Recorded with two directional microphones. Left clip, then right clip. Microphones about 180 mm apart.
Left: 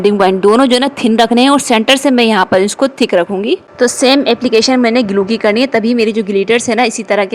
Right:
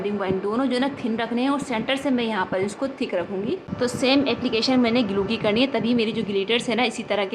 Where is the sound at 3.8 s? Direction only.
45° left (ahead or behind).